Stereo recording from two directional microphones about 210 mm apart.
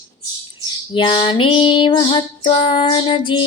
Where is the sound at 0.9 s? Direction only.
25° left (ahead or behind).